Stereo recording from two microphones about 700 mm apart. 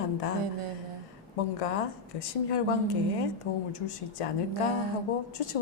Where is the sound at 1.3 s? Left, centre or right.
Left.